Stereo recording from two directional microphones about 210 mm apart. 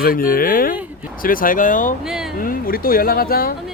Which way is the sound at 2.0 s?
Centre (ahead or behind).